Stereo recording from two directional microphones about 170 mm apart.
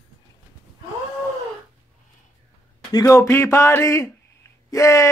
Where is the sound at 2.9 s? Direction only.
15° left (ahead or behind).